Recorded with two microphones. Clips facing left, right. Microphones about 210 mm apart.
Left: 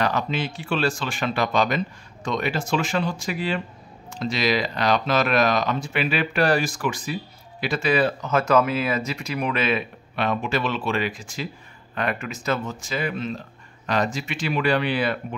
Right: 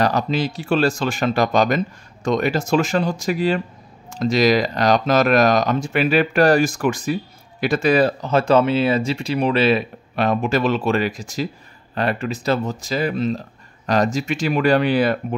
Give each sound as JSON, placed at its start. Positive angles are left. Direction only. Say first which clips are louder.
{"t": 0.0, "sound": "speech", "louder": "right 5 dB", "side_deg": -40}